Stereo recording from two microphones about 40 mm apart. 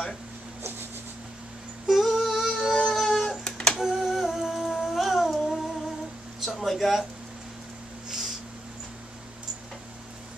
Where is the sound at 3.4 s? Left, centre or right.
Centre.